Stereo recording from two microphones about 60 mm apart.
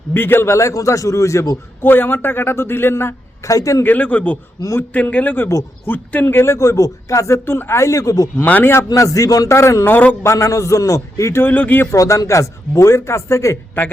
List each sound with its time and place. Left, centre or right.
0.1 s a man's voice: left
0.5 s speech: left
1.8 s a man's voice: left
3.4 s speech: left
3.8 s a man's voice: left
6.2 s speech: left
7.3 s speech: left
8.4 s a man's voice: left
8.9 s speech: left
9.5 s speech: left
9.8 s a man's voice: left
10.2 s speech: left
11.4 s a man's voice: left
11.9 s speech: left